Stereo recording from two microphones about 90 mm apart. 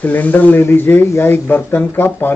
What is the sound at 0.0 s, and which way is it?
Speech, 20° left (ahead or behind).